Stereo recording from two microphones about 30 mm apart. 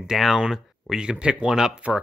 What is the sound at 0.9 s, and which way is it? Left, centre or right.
Speech, right.